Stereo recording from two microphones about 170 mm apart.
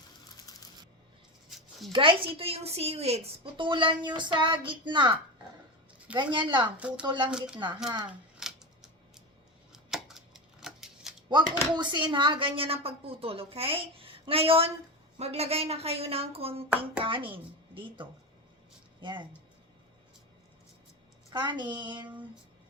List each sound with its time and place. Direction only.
1.5 s a sound: centre (ahead or behind)
1.9 s a woman's voice: 30° right (ahead or behind)
6.1 s a woman's voice: 25° right (ahead or behind)
6.7 s speech: 5° right (ahead or behind)
7.0 s a woman's voice: 30° right (ahead or behind)
7.3 s speech: 5° right (ahead or behind)
8.4 s scissors: 5° right (ahead or behind)
9.7 s a sound: centre (ahead or behind)
11.3 s speech: 25° right (ahead or behind)
21.2 s a woman's voice: 25° right (ahead or behind)